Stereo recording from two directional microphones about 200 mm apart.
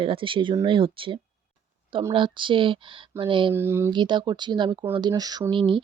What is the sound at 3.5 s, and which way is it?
Speech, 10° right (ahead or behind).